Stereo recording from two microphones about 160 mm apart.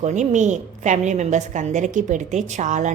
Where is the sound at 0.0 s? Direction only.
45° right (ahead or behind).